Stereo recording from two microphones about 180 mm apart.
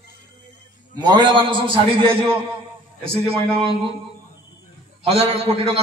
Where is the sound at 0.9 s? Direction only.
25° right (ahead or behind).